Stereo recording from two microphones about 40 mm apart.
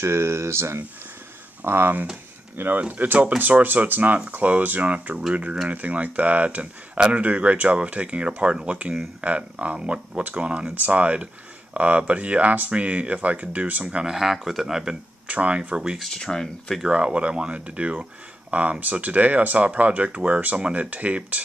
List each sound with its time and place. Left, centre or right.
0.1 s speech: right
1.6 s speech: right
2.9 s speech: right
14.1 s speech: centre
15.2 s speech: right
16.2 s speech: centre
16.9 s speech: right
20.6 s speech: right
20.9 s speech: right